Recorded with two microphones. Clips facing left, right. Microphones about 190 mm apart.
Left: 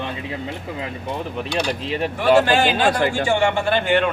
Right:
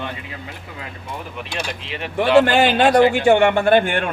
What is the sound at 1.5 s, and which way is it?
Speech, 40° left (ahead or behind).